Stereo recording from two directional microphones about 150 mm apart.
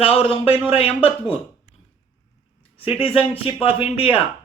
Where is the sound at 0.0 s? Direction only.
40° left (ahead or behind).